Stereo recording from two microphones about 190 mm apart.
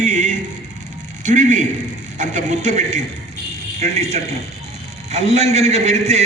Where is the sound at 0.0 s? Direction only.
40° right (ahead or behind).